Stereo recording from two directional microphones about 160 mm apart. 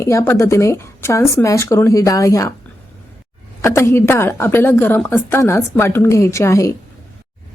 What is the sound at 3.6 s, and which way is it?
A woman's voice, 15° left (ahead or behind).